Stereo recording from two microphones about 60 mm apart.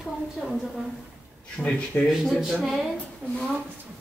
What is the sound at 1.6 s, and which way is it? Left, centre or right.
Speech, left.